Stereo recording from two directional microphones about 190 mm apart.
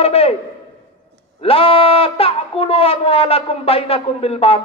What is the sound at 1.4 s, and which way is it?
Speech, 30° left (ahead or behind).